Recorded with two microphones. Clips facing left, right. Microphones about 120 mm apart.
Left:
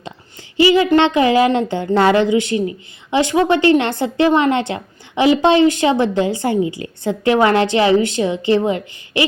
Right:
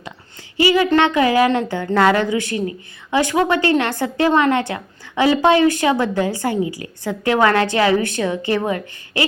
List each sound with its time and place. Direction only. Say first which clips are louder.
0.5 s a woman's voice: left 3 dB; 25° left (ahead or behind)